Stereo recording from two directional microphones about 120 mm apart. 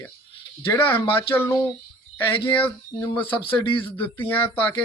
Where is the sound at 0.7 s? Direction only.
15° left (ahead or behind).